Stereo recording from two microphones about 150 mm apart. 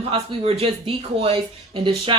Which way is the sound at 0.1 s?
40° right (ahead or behind).